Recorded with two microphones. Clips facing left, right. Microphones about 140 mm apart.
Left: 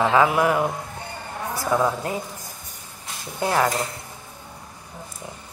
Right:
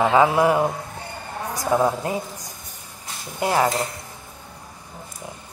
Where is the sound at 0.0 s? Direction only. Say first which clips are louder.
Right 2 dB; 20° right (ahead or behind).